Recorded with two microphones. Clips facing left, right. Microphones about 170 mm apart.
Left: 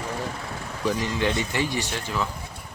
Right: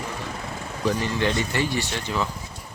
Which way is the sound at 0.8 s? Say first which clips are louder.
Right 1 dB; 10° left (ahead or behind).